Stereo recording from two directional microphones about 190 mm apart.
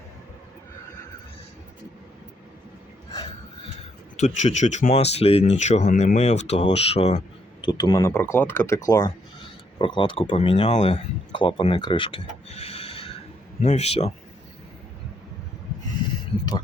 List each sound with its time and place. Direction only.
4.2 s speech: 35° left (ahead or behind)